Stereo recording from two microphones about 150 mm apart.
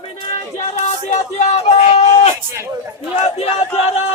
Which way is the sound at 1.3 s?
50° left (ahead or behind).